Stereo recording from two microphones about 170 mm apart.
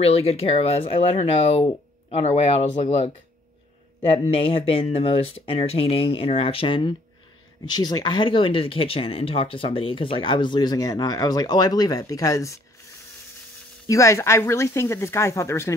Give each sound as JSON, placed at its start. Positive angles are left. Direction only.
{"t": 0.0, "sound": "speech", "side_deg": 35}
{"t": 4.3, "sound": "speech", "side_deg": 30}
{"t": 13.8, "sound": "speech", "side_deg": 20}